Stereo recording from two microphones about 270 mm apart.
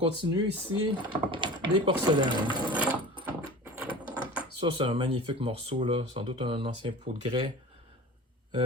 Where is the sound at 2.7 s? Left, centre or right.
Centre.